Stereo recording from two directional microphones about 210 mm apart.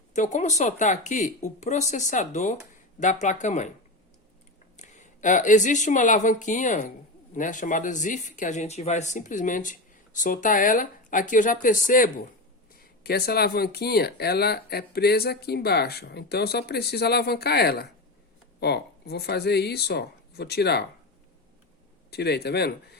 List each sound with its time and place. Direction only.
0.1 s speech: 35° left (ahead or behind)
4.8 s a woman's voice: 35° left (ahead or behind); by 20.8 s 50° left (ahead or behind)
22.1 s speech: 50° left (ahead or behind)